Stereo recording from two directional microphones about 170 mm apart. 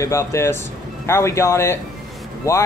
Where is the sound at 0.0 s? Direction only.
15° left (ahead or behind).